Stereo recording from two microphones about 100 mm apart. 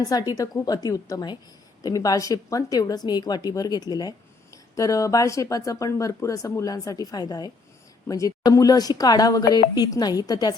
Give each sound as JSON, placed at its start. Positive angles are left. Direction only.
{"t": 0.0, "sound": "a woman's voice", "side_deg": 40}